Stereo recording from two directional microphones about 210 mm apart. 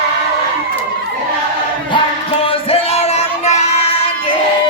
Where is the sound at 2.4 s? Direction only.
30° left (ahead or behind).